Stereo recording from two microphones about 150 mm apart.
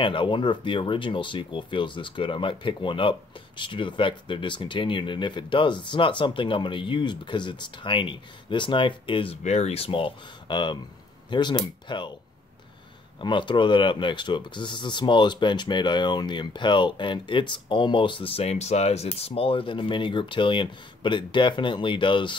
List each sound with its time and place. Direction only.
0.0 s speech: 35° left (ahead or behind)
13.2 s speech: 30° left (ahead or behind)